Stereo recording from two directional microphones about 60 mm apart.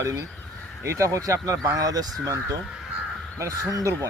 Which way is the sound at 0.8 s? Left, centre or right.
Right.